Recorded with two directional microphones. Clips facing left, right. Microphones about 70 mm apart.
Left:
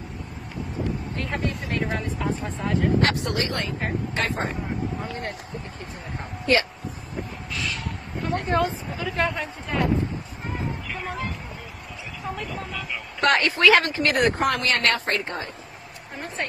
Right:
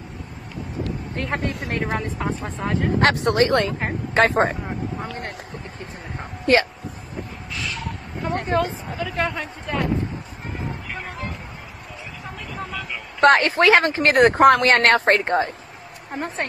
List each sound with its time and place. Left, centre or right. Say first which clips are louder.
1.1 s speech: right 2 dB; right
6.4 s speech: right 4 dB; right
7.6 s a sound: right 3 dB; centre
8.5 s a woman's voice: right 1 dB; centre
13.2 s speech: right 5 dB; right